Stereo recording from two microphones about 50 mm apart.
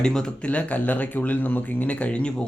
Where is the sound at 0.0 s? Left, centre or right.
Centre.